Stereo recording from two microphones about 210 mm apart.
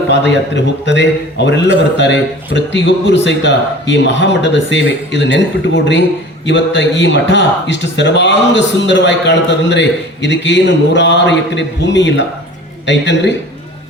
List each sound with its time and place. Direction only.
0.1 s speech: 55° left (ahead or behind)